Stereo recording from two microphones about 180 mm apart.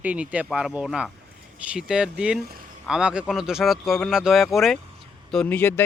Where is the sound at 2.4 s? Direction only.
55° right (ahead or behind).